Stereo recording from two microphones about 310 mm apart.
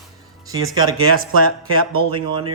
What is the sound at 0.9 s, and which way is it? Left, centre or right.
Speech, right.